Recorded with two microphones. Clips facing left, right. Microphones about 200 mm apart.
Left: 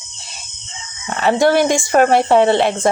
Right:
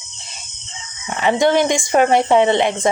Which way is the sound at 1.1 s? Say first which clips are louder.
Left 1 dB; 15° right (ahead or behind).